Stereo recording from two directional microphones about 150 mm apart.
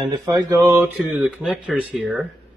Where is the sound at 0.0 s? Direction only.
25° right (ahead or behind).